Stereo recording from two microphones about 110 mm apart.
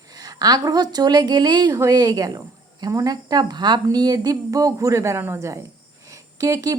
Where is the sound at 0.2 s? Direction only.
35° right (ahead or behind).